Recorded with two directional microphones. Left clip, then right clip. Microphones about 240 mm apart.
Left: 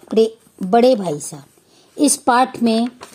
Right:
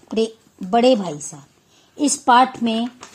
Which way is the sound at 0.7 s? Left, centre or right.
Left.